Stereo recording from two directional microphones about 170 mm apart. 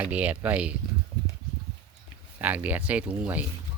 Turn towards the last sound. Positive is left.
turn(degrees=-10)  # may be behind; listen again after turning